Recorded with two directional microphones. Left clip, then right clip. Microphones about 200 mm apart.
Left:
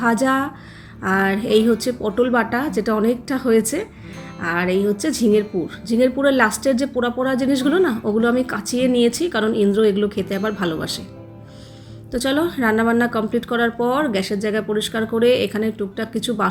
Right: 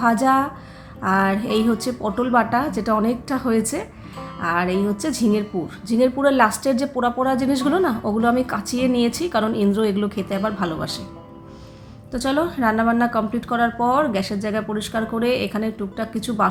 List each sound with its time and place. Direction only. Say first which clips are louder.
0.0 s speech: right 1 dB; 5° left (ahead or behind)
12.1 s speech: left 1 dB; 5° left (ahead or behind)